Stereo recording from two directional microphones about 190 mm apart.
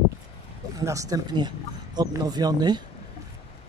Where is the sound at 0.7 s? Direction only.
15° right (ahead or behind).